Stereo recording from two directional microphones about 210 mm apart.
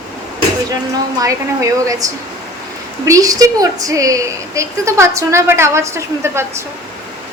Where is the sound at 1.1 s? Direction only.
15° right (ahead or behind).